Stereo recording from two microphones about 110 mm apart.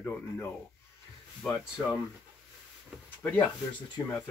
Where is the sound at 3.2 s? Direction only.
10° left (ahead or behind).